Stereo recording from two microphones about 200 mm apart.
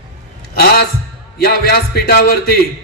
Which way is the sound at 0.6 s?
50° left (ahead or behind).